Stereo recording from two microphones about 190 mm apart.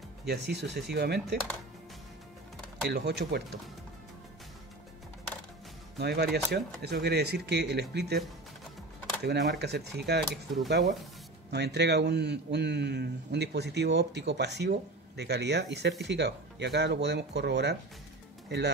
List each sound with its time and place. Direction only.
0.3 s speech: 65° right (ahead or behind)
2.9 s speech: 60° right (ahead or behind)
5.9 s speech: 60° right (ahead or behind)
9.2 s speech: 60° right (ahead or behind)